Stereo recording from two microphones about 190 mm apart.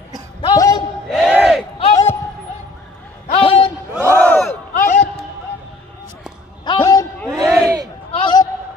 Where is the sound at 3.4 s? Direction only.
25° left (ahead or behind).